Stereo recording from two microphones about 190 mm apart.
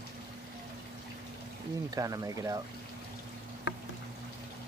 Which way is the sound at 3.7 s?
65° left (ahead or behind).